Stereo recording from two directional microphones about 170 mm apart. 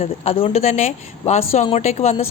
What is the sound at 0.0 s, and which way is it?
A woman's voice, 35° left (ahead or behind).